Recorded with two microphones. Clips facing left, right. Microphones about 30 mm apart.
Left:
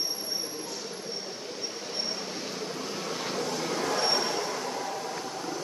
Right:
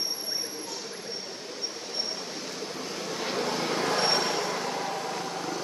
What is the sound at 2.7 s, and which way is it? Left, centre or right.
Vehicle, centre.